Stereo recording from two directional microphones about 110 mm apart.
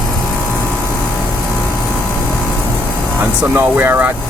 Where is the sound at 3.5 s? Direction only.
20° right (ahead or behind).